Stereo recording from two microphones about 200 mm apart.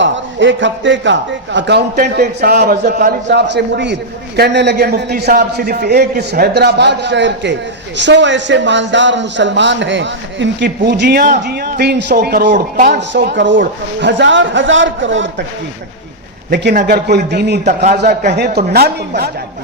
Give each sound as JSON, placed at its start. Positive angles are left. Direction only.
{"t": 0.0, "sound": "speech", "side_deg": -65}
{"t": 2.0, "sound": "a man's voice", "side_deg": -50}
{"t": 11.2, "sound": "a man's voice", "side_deg": -50}
{"t": 16.5, "sound": "a man's voice", "side_deg": -55}